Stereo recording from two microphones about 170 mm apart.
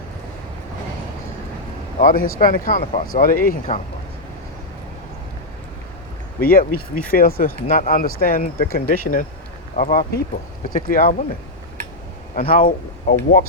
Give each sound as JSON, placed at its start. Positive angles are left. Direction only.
{"t": 2.0, "sound": "speech", "side_deg": 55}
{"t": 6.4, "sound": "speech", "side_deg": 60}
{"t": 12.3, "sound": "speech", "side_deg": 55}